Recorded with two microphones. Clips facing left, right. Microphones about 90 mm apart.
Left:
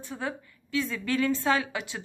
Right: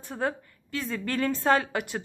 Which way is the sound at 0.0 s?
50° right (ahead or behind).